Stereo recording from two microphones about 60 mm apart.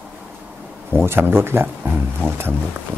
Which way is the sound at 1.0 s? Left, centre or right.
Right.